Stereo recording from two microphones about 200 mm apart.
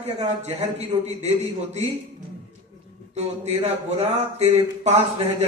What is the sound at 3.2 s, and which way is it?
Speech, 35° right (ahead or behind).